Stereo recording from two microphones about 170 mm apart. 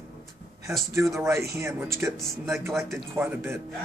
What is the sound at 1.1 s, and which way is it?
Speech, 15° right (ahead or behind).